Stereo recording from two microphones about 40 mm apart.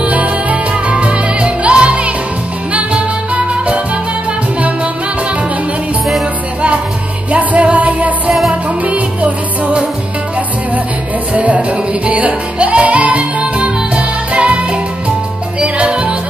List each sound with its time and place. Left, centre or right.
0.1 s music: right
7.2 s music: right
11.3 s music: right